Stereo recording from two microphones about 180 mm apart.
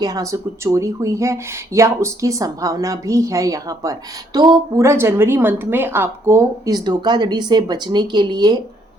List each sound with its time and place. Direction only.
0.0 s speech: 20° right (ahead or behind)